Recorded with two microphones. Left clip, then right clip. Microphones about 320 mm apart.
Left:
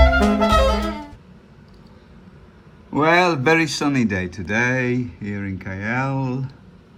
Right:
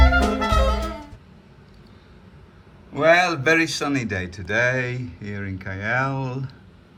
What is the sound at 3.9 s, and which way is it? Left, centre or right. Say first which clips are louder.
Speech: left 3 dB; centre.